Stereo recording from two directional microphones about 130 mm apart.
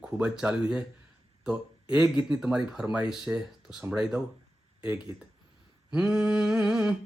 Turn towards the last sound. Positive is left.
turn(degrees=-5)  # may be behind; listen again after turning